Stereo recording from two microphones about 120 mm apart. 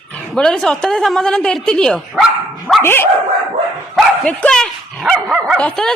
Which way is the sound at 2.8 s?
20° left (ahead or behind).